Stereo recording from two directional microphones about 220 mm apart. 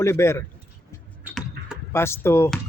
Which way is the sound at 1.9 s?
10° left (ahead or behind).